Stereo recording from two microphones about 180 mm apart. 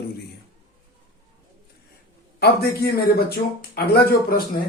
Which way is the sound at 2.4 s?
60° left (ahead or behind).